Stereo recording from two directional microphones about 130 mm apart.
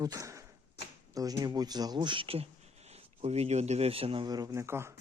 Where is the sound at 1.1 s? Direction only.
30° right (ahead or behind).